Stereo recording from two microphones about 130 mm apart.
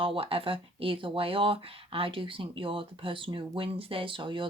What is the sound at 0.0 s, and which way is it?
Speech, 45° right (ahead or behind).